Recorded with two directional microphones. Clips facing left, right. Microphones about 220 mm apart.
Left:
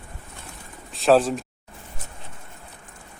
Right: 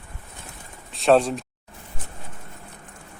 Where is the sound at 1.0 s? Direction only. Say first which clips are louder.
Even; centre (ahead or behind).